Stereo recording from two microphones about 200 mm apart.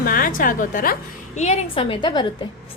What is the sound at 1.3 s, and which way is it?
Speech, 30° left (ahead or behind).